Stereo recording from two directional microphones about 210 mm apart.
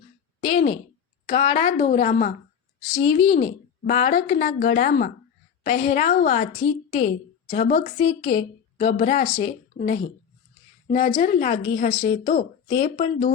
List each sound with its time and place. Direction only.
0.4 s a sound: 25° left (ahead or behind)
1.3 s a woman's voice: 25° left (ahead or behind)
2.9 s a woman's voice: 25° left (ahead or behind); by 5.1 s 40° left (ahead or behind)
5.6 s a woman's voice: 30° left (ahead or behind)
7.9 s speech: 25° left (ahead or behind)
9.0 s a woman's voice: 40° left (ahead or behind)
9.2 s speech: 20° left (ahead or behind)
9.7 s a woman's voice: 40° left (ahead or behind)
11.2 s a woman's voice: 40° left (ahead or behind)
12.7 s speech: 25° left (ahead or behind)